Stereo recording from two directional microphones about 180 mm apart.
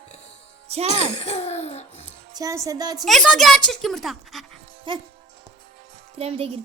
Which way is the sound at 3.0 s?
Centre (ahead or behind).